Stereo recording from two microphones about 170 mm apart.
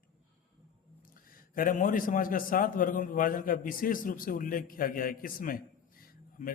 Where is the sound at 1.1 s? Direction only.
55° left (ahead or behind).